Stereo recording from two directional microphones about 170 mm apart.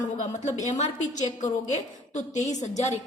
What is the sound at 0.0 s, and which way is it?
A woman's voice, 45° left (ahead or behind).